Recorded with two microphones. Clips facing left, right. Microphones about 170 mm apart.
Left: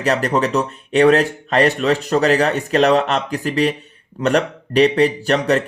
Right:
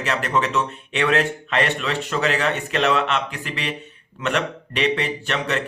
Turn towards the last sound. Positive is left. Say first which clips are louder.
# left 8 dB
turn(degrees=40)  # may be behind; listen again after turning